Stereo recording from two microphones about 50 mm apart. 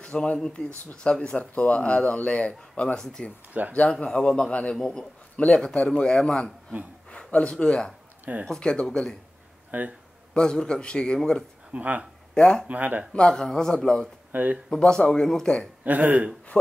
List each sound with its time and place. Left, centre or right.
0.0 s speech: centre
3.0 s speech: centre; by 4.7 s left
4.7 s a man's voice: centre
7.1 s a sound: left
7.6 s speech: centre
9.7 s speech: right
10.3 s speech: centre
11.7 s speech: right
12.4 s speech: centre
12.6 s speech: right
13.1 s speech: centre
14.3 s speech: right
14.7 s speech: centre
15.8 s speech: right